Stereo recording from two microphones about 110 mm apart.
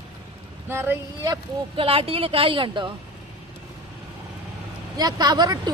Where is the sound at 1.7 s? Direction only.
60° right (ahead or behind).